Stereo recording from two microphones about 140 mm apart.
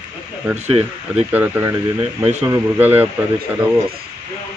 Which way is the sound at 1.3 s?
10° right (ahead or behind).